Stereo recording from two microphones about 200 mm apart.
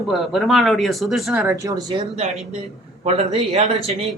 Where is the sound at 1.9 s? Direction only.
30° right (ahead or behind).